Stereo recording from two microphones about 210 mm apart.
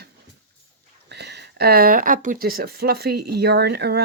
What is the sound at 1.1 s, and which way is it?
Speech, 55° right (ahead or behind).